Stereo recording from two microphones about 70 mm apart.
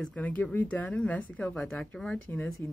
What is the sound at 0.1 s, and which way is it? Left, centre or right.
Speech, left.